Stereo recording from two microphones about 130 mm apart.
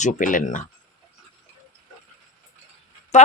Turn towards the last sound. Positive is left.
turn(degrees=60)  # may be behind; listen again after turning